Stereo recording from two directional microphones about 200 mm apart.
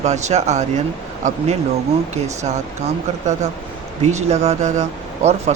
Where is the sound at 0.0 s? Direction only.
35° right (ahead or behind).